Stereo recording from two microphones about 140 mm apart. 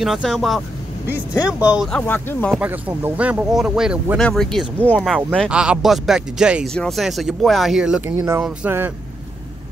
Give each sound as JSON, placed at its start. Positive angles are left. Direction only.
{"t": 0.0, "sound": "speech", "side_deg": 0}
{"t": 1.1, "sound": "speech", "side_deg": -10}
{"t": 1.9, "sound": "speech", "side_deg": 10}
{"t": 2.5, "sound": "speech", "side_deg": -10}
{"t": 5.5, "sound": "speech", "side_deg": -5}